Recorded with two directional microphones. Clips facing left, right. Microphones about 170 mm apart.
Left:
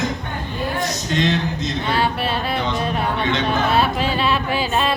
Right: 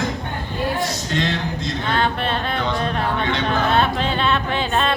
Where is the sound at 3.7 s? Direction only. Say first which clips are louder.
Even; 5° left (ahead or behind).